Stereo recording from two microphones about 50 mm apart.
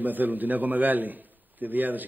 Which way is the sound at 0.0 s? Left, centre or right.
Right.